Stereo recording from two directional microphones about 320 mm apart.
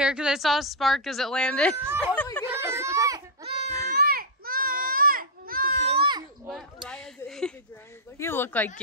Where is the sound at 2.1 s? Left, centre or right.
Centre.